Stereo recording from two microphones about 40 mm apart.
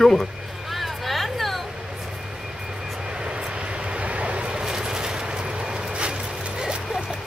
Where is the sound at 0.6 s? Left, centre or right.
Centre.